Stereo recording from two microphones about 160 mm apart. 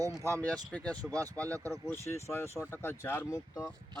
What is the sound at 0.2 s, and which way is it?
Speech, 20° right (ahead or behind).